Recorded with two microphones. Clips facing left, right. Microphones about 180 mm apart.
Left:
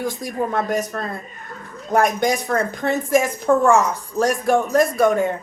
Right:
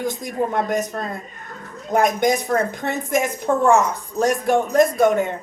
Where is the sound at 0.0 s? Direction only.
20° right (ahead or behind).